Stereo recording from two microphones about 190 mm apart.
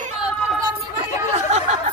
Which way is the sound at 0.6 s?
20° right (ahead or behind).